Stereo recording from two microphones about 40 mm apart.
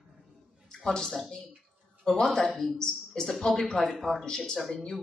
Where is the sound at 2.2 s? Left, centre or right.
Centre.